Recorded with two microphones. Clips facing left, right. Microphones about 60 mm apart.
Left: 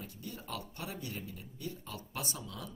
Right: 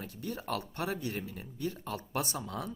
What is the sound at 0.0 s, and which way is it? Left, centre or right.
Speech, right.